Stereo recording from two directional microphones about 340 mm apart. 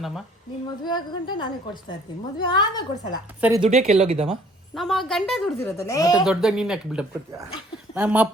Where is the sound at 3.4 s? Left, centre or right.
Centre.